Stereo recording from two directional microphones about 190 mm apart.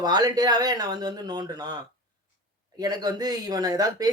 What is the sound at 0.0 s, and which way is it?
Speech, 20° right (ahead or behind).